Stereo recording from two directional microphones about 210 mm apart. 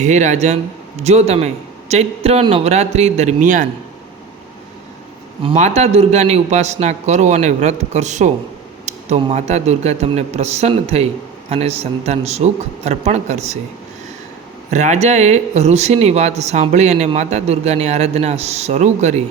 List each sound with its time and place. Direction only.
0.0 s speech: 35° right (ahead or behind)
5.4 s speech: 30° right (ahead or behind)
14.7 s speech: 35° right (ahead or behind)